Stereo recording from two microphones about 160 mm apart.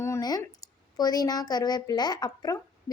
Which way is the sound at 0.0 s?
20° left (ahead or behind).